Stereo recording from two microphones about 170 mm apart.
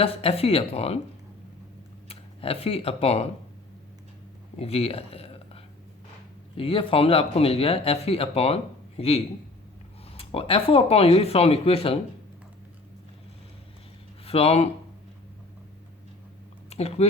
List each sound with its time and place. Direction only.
0.0 s speech: 35° left (ahead or behind)
2.0 s speech: 35° left (ahead or behind)
4.5 s speech: 35° left (ahead or behind)
6.6 s speech: 35° left (ahead or behind)
14.3 s speech: 35° left (ahead or behind)
16.6 s speech: 35° left (ahead or behind)